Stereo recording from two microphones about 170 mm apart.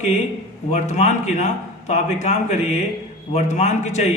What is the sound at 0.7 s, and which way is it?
A man's voice, 45° left (ahead or behind).